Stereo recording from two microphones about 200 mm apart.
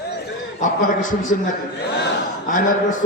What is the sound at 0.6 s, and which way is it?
Speech, 40° left (ahead or behind).